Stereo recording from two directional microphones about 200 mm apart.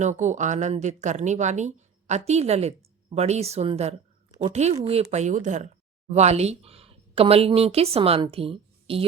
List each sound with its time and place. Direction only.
0.0 s speech: 35° right (ahead or behind)